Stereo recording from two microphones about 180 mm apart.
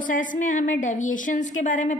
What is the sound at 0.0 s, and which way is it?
A woman's voice, 45° left (ahead or behind).